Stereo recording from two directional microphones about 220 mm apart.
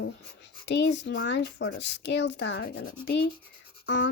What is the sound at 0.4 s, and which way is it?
Speech, 55° left (ahead or behind).